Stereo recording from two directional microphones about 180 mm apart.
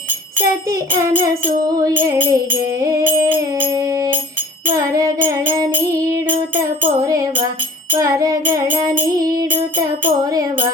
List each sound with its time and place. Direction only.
0.9 s music: 20° right (ahead or behind)
4.8 s music: 20° right (ahead or behind)